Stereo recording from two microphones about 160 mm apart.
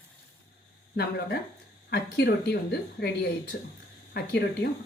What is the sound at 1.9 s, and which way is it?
Speech, 90° left.